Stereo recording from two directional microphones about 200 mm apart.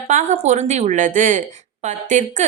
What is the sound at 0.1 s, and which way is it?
A woman's voice, 35° right (ahead or behind).